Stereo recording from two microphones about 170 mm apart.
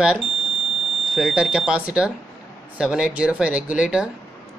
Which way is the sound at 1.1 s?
5° right (ahead or behind).